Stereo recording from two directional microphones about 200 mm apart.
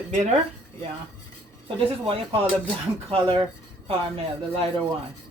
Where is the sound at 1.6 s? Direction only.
30° right (ahead or behind).